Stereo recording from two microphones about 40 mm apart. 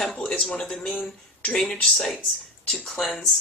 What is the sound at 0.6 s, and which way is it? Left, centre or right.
Speech, centre.